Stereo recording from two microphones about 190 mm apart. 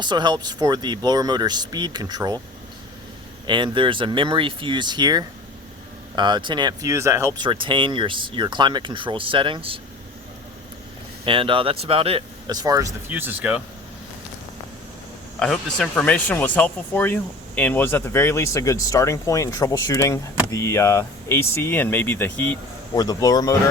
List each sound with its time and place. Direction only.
0.0 s speech: 25° right (ahead or behind)
3.4 s speech: 25° right (ahead or behind)
11.3 s speech: 25° right (ahead or behind); by 13.6 s 10° right (ahead or behind)
15.4 s speech: centre (ahead or behind); by 23.6 s 20° left (ahead or behind)